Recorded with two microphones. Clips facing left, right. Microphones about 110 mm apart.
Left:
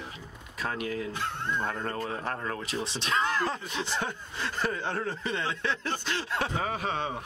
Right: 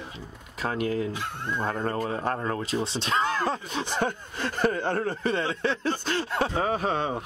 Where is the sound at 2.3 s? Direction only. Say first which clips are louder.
Right 5 dB; 30° right (ahead or behind).